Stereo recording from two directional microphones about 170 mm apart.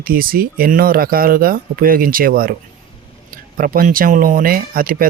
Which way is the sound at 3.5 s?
55° right (ahead or behind).